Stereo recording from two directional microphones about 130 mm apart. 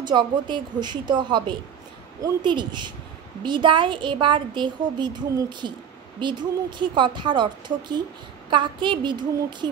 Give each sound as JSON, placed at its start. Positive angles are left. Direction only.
{"t": 0.0, "sound": "a woman's voice", "side_deg": -35}